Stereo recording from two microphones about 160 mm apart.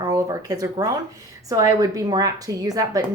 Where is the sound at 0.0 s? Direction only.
20° right (ahead or behind).